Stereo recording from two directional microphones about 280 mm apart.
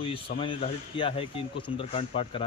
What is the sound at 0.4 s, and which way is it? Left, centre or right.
Speech, centre.